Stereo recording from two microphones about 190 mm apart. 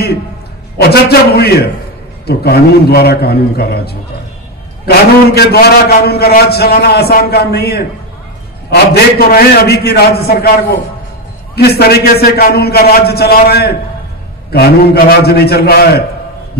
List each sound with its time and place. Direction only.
0.7 s a man's voice: 55° left (ahead or behind)
11.5 s a man's voice: 55° left (ahead or behind)